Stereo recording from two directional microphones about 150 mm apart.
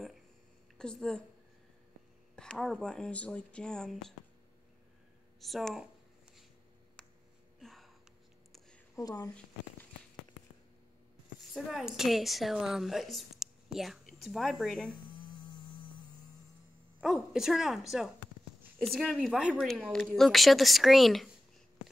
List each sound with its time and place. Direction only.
0.7 s speech: 5° left (ahead or behind)
2.3 s a woman's voice: 5° left (ahead or behind)
5.4 s a woman's voice: centre (ahead or behind)
7.6 s a sound: centre (ahead or behind)
8.9 s speech: 25° left (ahead or behind)
11.5 s a woman's voice: centre (ahead or behind)
17.0 s a woman's voice: centre (ahead or behind)